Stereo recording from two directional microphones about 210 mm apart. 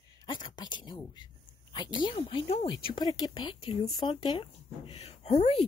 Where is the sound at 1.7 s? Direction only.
20° left (ahead or behind).